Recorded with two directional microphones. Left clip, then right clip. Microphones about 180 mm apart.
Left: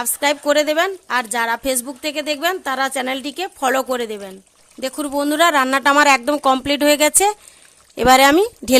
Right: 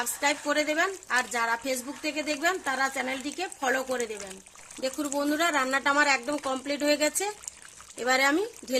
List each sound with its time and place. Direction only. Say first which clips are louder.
0.0 s a woman's voice: left 9 dB; 65° left (ahead or behind)